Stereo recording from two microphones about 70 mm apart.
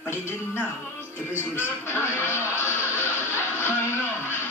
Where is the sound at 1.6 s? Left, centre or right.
Left.